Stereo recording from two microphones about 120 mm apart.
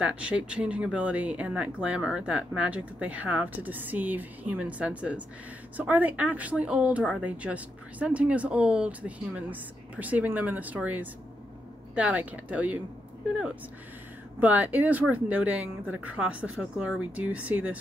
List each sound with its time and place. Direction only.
0.0 s speech: 10° right (ahead or behind)
14.4 s speech: 15° right (ahead or behind)